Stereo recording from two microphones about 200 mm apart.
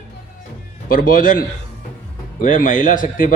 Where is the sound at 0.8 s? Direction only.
45° left (ahead or behind).